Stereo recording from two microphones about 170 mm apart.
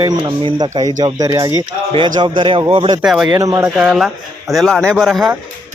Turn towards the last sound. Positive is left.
turn(degrees=0)  # may be behind; listen again after turning